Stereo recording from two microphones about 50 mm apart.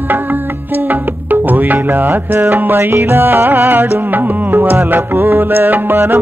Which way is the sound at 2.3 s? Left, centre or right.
Right.